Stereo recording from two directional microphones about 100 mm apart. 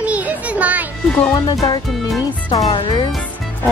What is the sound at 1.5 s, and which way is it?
Speech, 40° left (ahead or behind).